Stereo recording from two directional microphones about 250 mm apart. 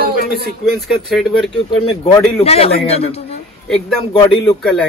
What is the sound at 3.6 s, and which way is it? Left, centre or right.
Speech, centre.